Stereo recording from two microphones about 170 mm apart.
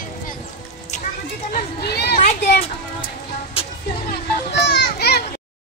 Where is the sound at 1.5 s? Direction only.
70° left (ahead or behind).